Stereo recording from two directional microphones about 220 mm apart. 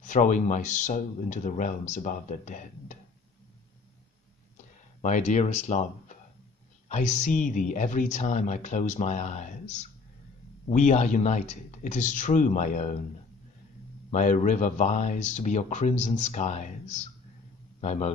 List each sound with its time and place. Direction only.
0.0 s speech: 35° left (ahead or behind)
5.0 s speech: 35° left (ahead or behind)
14.1 s a man's voice: 35° left (ahead or behind)